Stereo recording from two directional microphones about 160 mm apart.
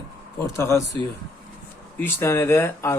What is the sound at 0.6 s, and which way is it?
Speech, 15° left (ahead or behind).